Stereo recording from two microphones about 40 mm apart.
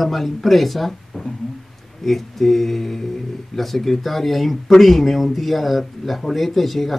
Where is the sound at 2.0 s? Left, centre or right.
Centre.